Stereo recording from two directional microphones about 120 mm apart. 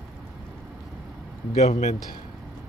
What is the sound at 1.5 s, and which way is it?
Speech, 70° left (ahead or behind).